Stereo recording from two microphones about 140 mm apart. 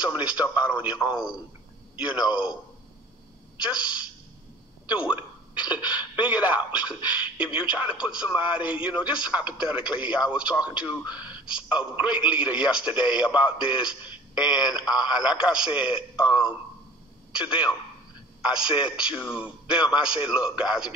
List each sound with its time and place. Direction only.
0.0 s speech: 10° right (ahead or behind)
3.5 s speech: 10° right (ahead or behind)
4.8 s a sound: 10° right (ahead or behind)
5.7 s throat clearing: 30° left (ahead or behind)
6.1 s speech: 10° right (ahead or behind)
11.1 s speech: 30° left (ahead or behind)
11.4 s speech: 5° right (ahead or behind)